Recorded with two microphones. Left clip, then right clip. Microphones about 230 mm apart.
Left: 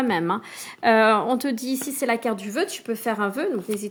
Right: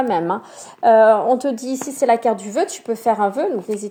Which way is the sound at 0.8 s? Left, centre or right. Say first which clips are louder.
Right 6 dB; left.